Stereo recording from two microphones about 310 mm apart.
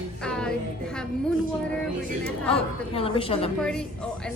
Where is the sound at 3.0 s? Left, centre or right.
Centre.